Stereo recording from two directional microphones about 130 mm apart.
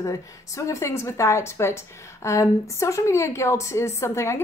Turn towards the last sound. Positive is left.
turn(degrees=20)  # may be behind; listen again after turning